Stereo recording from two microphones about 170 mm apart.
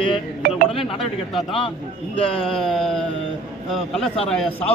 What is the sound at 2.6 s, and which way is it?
Speech, 5° left (ahead or behind).